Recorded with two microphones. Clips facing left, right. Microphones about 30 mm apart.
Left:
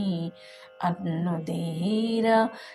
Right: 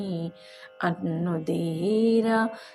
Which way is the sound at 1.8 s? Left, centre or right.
Centre.